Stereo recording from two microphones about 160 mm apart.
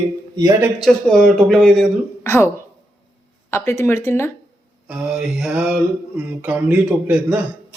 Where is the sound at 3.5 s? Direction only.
15° left (ahead or behind).